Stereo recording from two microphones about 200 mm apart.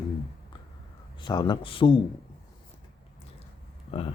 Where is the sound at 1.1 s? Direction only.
25° left (ahead or behind).